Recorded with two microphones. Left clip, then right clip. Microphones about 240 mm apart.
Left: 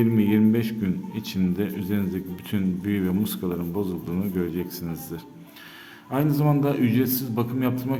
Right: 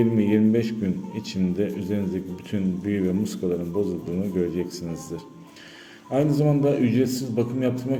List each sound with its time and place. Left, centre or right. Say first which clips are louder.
0.0 s a man's voice: right 1 dB; centre